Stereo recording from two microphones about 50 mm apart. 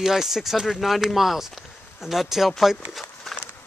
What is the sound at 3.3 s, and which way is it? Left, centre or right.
Horse, centre.